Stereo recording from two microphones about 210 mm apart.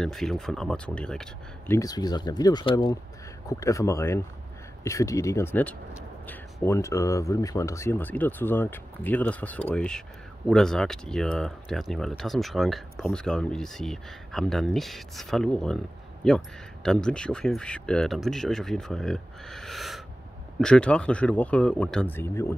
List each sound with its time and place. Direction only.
0.0 s speech: centre (ahead or behind)
1.8 s speech: 20° left (ahead or behind)